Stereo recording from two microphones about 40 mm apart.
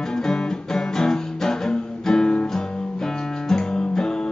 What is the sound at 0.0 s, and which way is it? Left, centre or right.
Music, centre.